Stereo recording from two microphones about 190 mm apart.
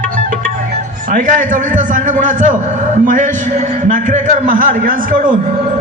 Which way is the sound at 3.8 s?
40° right (ahead or behind).